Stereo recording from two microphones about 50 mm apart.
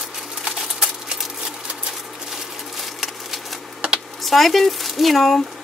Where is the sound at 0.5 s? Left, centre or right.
Centre.